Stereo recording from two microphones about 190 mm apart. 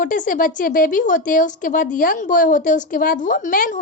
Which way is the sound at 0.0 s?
45° left (ahead or behind).